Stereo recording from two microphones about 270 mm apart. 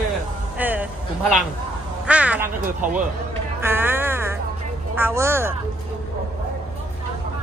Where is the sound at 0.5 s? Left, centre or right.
Centre.